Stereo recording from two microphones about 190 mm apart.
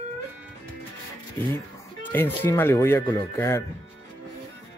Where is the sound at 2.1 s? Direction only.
10° left (ahead or behind).